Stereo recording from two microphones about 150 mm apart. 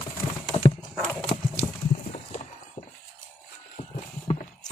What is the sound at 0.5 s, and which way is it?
Clip-clop, 35° left (ahead or behind).